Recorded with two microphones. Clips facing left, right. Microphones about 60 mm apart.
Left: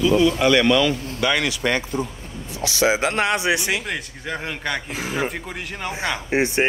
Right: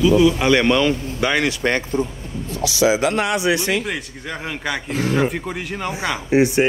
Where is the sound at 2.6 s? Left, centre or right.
Left.